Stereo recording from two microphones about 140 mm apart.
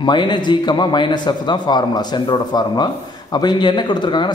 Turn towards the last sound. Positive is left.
turn(degrees=35)  # may be behind; listen again after turning